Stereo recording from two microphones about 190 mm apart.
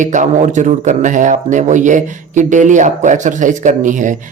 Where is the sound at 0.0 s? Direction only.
40° right (ahead or behind).